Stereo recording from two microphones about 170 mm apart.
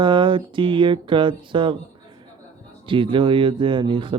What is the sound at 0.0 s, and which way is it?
Speech, 30° right (ahead or behind).